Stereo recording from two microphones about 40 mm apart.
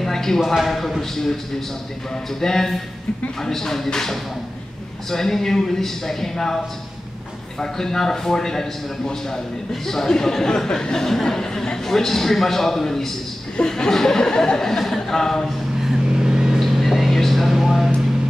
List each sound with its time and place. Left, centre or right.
0.0 s a sound: centre
0.6 s a man's voice: centre
2.4 s speech: centre
15.4 s a sound: centre
16.1 s vehicle: centre
16.5 s vehicle: centre